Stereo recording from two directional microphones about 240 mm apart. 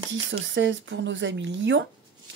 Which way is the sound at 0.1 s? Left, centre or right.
Right.